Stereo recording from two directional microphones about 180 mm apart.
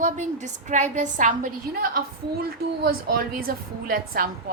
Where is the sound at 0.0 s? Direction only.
40° right (ahead or behind).